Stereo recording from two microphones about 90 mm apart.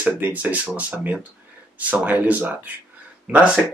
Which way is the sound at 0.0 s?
20° right (ahead or behind).